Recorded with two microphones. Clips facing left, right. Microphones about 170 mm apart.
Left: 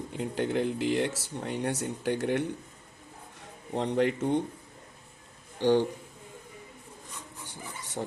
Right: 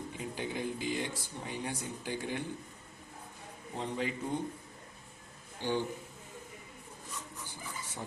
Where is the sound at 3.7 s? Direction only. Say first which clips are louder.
Left 9 dB; 70° left (ahead or behind).